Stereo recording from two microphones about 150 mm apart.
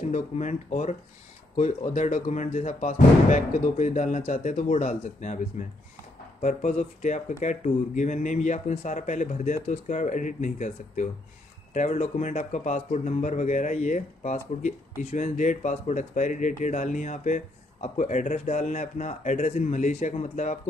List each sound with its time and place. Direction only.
0.0 s speech: 55° left (ahead or behind)